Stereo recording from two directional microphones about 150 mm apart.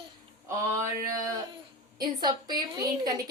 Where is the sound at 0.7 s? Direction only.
20° right (ahead or behind).